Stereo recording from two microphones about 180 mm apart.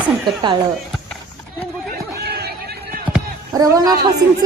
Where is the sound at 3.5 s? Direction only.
20° right (ahead or behind).